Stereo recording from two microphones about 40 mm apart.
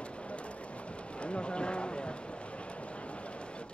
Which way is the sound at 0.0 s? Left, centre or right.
Left.